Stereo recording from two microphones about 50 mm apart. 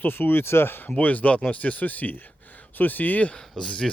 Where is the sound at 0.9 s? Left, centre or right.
Left.